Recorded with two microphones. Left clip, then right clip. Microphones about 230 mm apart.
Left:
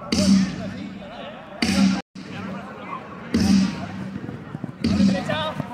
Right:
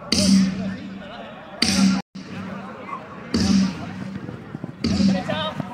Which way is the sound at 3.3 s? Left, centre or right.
Right.